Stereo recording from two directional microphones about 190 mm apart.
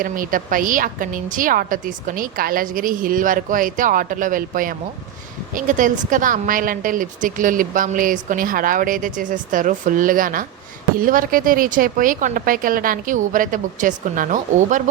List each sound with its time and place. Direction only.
0.0 s a woman's voice: 45° right (ahead or behind)